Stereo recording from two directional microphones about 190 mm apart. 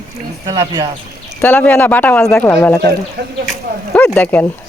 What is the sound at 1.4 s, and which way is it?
Speech, 10° left (ahead or behind).